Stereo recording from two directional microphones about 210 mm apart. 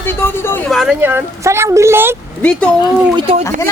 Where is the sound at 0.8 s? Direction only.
5° right (ahead or behind).